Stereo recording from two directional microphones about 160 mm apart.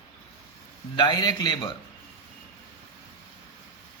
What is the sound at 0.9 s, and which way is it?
Speech, 25° left (ahead or behind).